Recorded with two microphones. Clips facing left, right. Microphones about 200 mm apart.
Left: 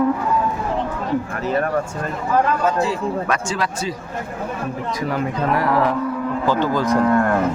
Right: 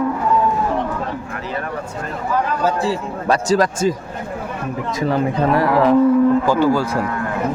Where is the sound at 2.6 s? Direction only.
30° right (ahead or behind).